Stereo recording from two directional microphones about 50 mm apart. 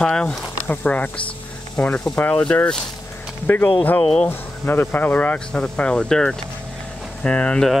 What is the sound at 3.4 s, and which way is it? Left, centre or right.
Speech, left.